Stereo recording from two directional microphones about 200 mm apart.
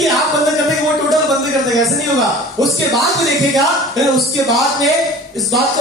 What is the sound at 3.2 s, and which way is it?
Speech, 15° left (ahead or behind).